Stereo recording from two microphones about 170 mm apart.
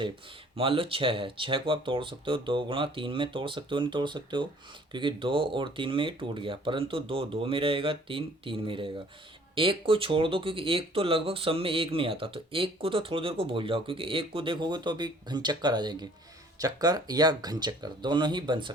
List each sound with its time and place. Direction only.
0.5 s speech: 30° right (ahead or behind)